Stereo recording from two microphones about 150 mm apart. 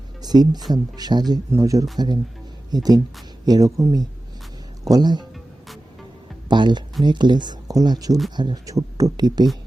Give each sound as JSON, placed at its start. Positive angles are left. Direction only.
{"t": 0.2, "sound": "speech", "side_deg": -25}
{"t": 6.5, "sound": "speech", "side_deg": -30}